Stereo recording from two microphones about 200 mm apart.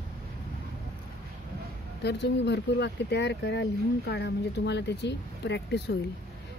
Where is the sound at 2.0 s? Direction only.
60° left (ahead or behind).